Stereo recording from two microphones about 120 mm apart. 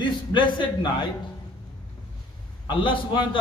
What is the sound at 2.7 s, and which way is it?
Speech, 40° left (ahead or behind).